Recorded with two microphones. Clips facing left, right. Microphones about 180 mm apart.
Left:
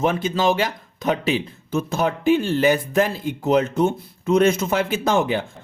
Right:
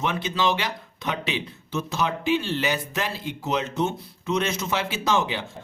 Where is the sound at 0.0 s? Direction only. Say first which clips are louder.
Left 5 dB; 45° left (ahead or behind).